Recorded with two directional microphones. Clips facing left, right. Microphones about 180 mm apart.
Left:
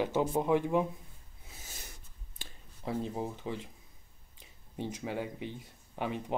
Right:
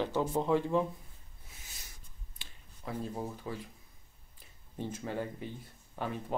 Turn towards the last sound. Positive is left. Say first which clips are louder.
# left 2 dB
turn(degrees=15)  # may be behind; listen again after turning